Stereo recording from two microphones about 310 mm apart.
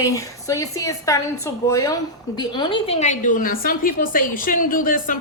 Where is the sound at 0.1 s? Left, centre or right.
Centre.